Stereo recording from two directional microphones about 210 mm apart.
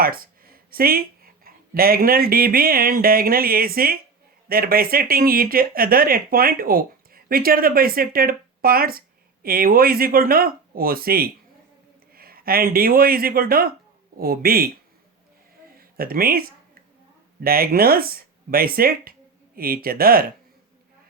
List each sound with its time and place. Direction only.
0.0 s speech: 45° right (ahead or behind)
15.8 s speech: 45° right (ahead or behind)